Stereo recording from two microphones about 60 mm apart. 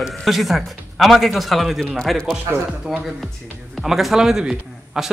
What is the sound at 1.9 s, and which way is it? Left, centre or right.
Speech, centre.